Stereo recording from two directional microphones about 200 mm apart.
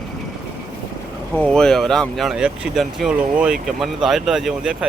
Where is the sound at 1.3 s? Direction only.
5° left (ahead or behind).